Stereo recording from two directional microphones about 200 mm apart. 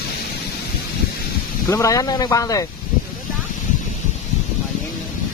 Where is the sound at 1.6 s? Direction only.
15° left (ahead or behind).